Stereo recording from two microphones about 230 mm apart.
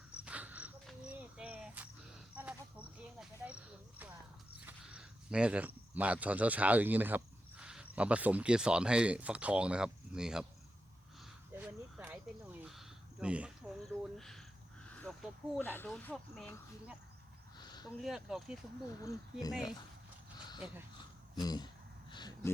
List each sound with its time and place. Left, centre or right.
0.3 s a sound: centre
4.6 s speech: centre
11.5 s cricket: centre
14.8 s speech: centre
17.6 s a sound: centre
18.0 s speech: centre
19.0 s speech: centre
21.3 s speech: centre
22.1 s a sound: centre